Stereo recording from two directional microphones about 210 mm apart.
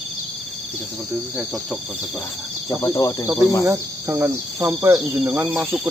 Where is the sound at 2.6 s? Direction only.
15° left (ahead or behind).